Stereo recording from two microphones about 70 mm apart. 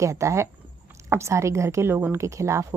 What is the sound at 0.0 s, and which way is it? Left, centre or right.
A woman's voice, right.